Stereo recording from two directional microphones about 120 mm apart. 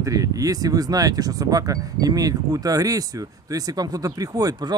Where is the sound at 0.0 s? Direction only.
30° right (ahead or behind).